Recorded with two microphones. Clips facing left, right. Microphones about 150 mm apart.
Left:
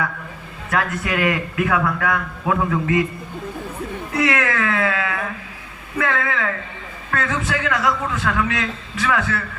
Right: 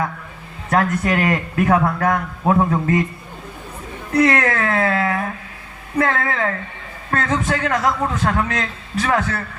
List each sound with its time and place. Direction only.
0.7 s a man's voice: 40° right (ahead or behind)
4.1 s a man's voice: 40° right (ahead or behind)